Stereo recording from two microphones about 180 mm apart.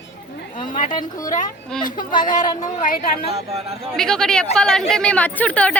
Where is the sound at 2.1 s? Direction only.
25° left (ahead or behind).